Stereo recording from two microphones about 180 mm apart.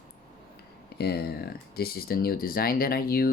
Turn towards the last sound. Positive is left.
turn(degrees=55)  # may be behind; listen again after turning